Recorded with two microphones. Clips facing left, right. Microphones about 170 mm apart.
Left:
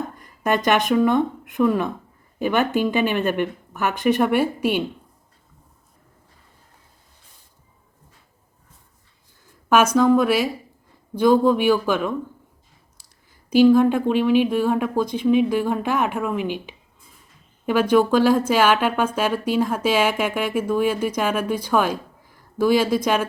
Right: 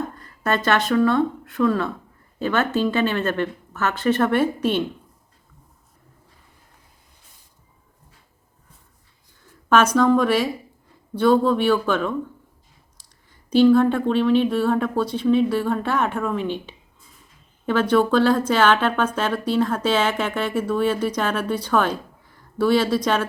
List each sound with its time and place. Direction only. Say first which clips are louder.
0.2 s speech: left 3 dB; 15° left (ahead or behind)
9.6 s speech: left 1 dB; 10° left (ahead or behind)
13.5 s speech: left 1 dB; 10° left (ahead or behind)